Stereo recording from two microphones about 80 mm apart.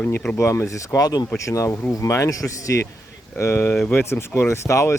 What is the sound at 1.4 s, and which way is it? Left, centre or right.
Speech, left.